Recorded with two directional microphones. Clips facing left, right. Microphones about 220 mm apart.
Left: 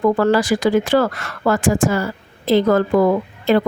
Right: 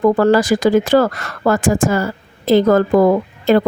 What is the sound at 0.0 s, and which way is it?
Speech, 40° right (ahead or behind).